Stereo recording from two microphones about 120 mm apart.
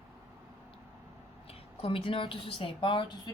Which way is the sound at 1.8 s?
50° left (ahead or behind).